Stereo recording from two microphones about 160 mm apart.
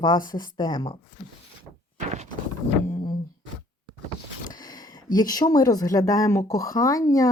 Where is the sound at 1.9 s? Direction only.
45° right (ahead or behind).